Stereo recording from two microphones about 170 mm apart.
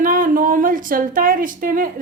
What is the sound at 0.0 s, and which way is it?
A woman's voice, 50° right (ahead or behind).